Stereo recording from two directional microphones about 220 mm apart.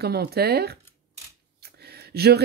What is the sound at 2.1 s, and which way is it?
Speech, 45° right (ahead or behind).